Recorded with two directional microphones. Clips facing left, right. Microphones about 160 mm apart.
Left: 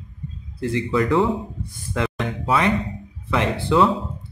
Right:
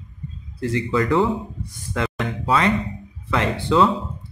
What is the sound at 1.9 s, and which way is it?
Speech, 20° left (ahead or behind).